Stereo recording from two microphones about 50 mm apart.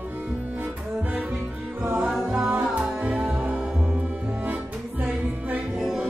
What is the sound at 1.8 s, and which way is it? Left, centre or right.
Music, right.